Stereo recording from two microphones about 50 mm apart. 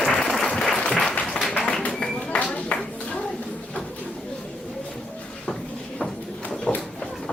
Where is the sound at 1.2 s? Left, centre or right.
Centre.